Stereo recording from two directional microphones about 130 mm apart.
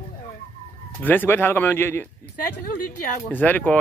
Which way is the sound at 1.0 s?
15° left (ahead or behind).